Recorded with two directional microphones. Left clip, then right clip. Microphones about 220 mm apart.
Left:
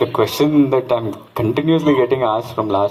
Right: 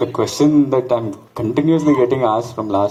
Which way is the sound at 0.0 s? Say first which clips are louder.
Left 1 dB; 20° left (ahead or behind).